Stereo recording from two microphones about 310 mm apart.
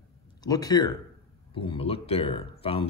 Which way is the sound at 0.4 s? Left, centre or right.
Centre.